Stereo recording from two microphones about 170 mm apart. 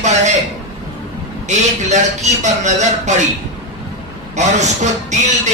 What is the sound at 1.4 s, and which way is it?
A man's voice, 45° right (ahead or behind).